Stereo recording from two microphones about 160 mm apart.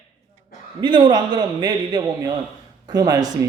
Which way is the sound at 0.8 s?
30° right (ahead or behind).